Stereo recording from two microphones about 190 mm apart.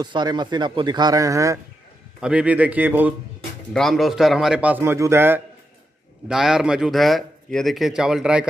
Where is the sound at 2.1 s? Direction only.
5° right (ahead or behind).